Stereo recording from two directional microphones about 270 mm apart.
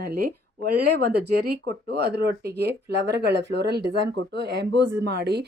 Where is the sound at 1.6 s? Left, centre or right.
Right.